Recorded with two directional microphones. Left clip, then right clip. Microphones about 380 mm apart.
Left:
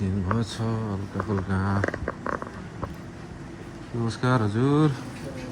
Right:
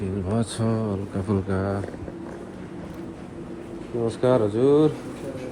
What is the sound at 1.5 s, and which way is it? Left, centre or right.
Speech, centre.